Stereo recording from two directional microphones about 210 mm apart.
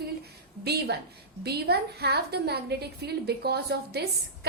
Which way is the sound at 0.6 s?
50° right (ahead or behind).